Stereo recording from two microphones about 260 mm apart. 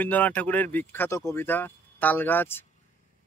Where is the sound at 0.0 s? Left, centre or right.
Centre.